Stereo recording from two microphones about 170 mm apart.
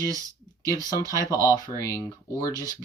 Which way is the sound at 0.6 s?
20° left (ahead or behind).